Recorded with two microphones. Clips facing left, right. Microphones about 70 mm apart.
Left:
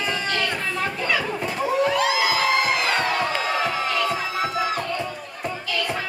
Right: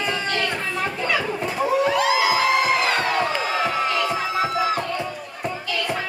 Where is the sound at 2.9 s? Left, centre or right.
Centre.